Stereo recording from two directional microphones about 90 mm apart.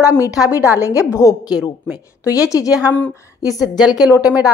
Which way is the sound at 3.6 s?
5° right (ahead or behind).